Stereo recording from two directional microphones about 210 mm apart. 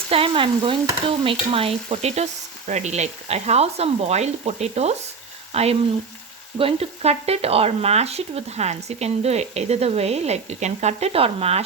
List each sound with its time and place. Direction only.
0.1 s stir: 25° right (ahead or behind)
5.5 s speech: 30° right (ahead or behind)